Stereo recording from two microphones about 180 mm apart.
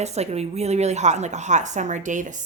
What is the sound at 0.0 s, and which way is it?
A woman's voice, 35° right (ahead or behind).